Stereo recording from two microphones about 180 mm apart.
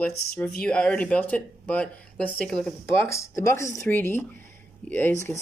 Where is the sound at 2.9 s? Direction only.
15° left (ahead or behind).